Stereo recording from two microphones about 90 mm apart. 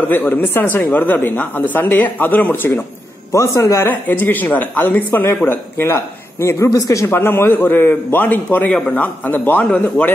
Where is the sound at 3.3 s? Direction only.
35° left (ahead or behind).